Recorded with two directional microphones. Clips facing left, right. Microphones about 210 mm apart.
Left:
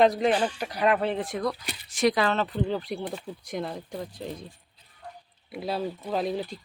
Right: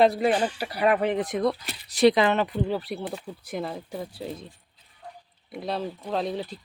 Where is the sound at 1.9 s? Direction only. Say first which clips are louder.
Right 5 dB; 35° right (ahead or behind).